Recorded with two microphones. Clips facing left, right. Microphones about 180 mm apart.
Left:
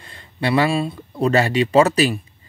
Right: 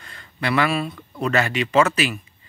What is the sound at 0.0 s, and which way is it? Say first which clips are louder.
Speech: left 4 dB; 30° left (ahead or behind).